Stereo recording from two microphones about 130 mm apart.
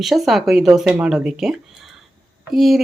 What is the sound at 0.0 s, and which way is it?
Speech, centre (ahead or behind).